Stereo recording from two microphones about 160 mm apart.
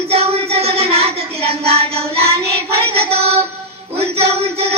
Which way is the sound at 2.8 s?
40° right (ahead or behind).